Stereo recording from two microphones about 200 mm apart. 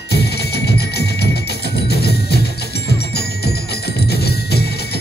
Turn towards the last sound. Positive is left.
turn(degrees=55)  # may be behind; listen again after turning